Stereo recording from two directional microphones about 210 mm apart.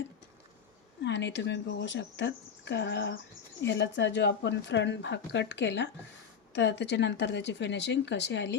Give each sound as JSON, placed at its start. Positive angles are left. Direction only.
{"t": 1.0, "sound": "speech", "side_deg": 55}